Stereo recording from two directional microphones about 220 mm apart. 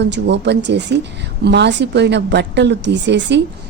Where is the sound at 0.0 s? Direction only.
50° right (ahead or behind).